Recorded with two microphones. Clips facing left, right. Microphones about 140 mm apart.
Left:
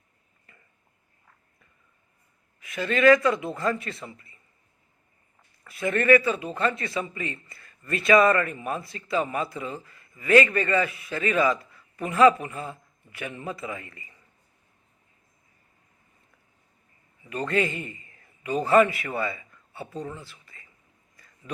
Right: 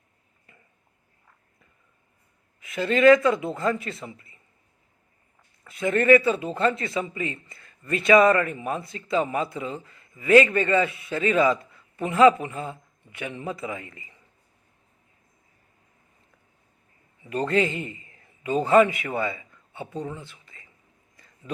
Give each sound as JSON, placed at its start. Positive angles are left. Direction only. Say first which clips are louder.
{"t": 2.6, "sound": "a man's voice", "louder": "right 3 dB", "side_deg": -25}
{"t": 5.6, "sound": "a man's voice", "louder": "right 2 dB", "side_deg": -20}
{"t": 17.2, "sound": "a man's voice", "louder": "right 3 dB", "side_deg": -30}
{"t": 20.1, "sound": "a sound", "louder": "right 2 dB", "side_deg": -20}